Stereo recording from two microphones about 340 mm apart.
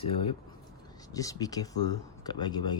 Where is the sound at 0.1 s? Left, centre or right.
Centre.